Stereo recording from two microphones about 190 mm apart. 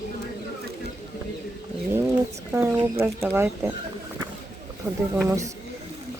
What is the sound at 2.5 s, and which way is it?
Speech, 10° right (ahead or behind).